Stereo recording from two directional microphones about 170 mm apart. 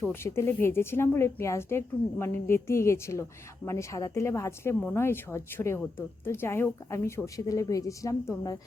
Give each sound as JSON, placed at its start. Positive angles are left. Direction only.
{"t": 0.0, "sound": "a woman's voice", "side_deg": 15}